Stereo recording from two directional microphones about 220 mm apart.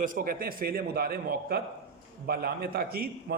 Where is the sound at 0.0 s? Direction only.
40° right (ahead or behind).